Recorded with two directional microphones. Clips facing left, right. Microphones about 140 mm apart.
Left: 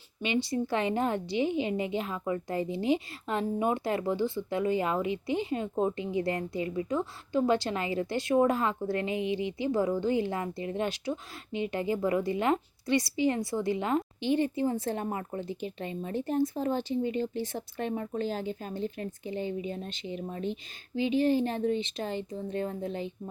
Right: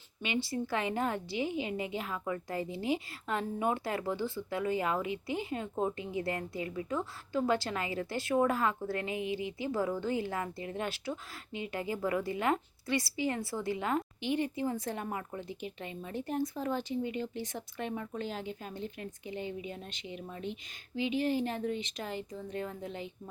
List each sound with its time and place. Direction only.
0.2 s a woman's voice: 20° left (ahead or behind)